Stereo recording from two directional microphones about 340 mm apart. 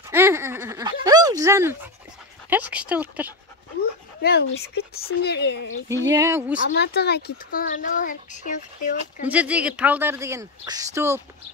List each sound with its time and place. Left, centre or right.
0.0 s a sound: centre
2.5 s speech: centre
4.2 s a child's voice: left
6.0 s speech: centre
6.7 s a child's voice: left
9.2 s speech: centre